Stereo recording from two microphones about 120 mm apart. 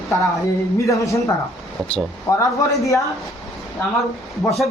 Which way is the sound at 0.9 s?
25° left (ahead or behind).